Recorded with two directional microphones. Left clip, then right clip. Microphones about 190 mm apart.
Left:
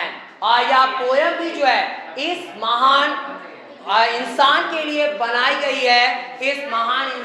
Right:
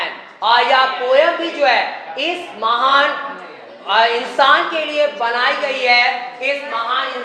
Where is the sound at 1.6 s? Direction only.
25° left (ahead or behind).